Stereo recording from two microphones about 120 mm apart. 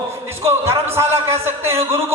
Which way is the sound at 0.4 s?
25° right (ahead or behind).